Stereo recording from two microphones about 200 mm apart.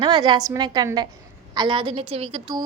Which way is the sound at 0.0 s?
20° right (ahead or behind).